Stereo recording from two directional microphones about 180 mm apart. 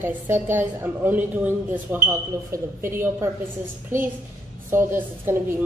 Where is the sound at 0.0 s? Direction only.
10° right (ahead or behind).